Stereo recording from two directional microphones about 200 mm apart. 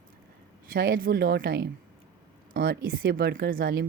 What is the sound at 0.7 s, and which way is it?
Speech, 45° right (ahead or behind).